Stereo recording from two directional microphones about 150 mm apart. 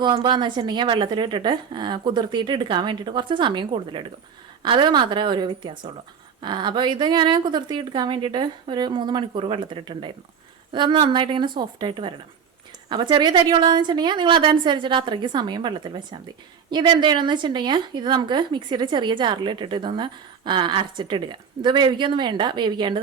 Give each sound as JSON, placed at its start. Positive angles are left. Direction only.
{"t": 0.0, "sound": "speech", "side_deg": -30}